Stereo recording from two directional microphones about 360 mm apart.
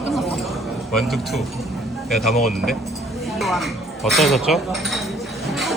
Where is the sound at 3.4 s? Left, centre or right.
Centre.